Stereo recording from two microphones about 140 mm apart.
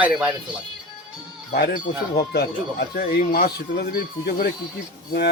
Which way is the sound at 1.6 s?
90° left.